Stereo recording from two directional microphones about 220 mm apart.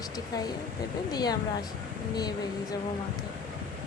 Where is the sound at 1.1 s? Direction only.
20° left (ahead or behind).